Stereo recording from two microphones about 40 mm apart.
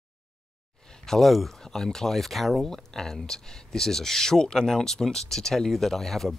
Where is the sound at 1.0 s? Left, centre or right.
Centre.